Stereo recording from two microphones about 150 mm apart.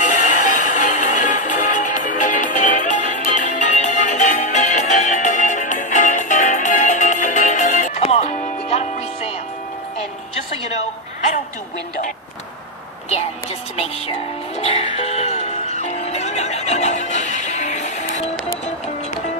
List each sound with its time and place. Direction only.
0.0 s music: 55° left (ahead or behind)
14.6 s music: 45° left (ahead or behind)